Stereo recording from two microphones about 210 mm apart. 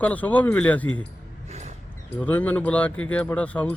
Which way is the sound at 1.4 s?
30° right (ahead or behind).